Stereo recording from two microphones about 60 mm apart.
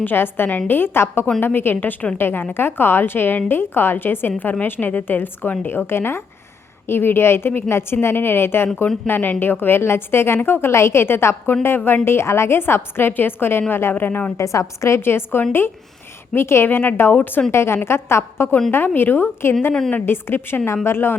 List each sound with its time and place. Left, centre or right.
0.0 s a woman's voice: left
14.3 s a woman's voice: left
17.5 s a woman's voice: left